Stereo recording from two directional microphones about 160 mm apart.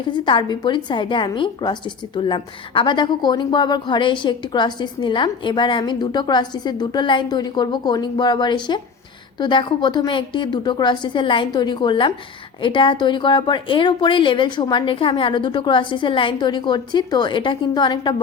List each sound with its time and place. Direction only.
0.1 s a woman's voice: 30° left (ahead or behind)